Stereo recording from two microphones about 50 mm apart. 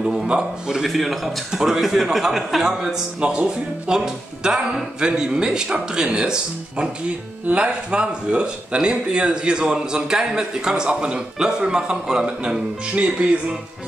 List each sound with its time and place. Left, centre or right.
0.0 s a man's voice: centre
0.8 s a man's voice: centre
12.9 s speech: right